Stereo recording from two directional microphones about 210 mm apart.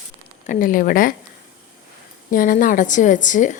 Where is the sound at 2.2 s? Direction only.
40° left (ahead or behind).